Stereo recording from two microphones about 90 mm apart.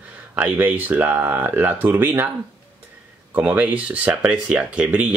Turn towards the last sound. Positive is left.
turn(degrees=-15)  # may be behind; listen again after turning